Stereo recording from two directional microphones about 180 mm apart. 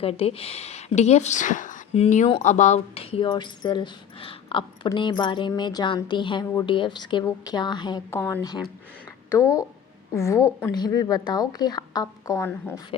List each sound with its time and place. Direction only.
0.0 s a woman's voice: 35° left (ahead or behind); by 12.8 s 15° left (ahead or behind)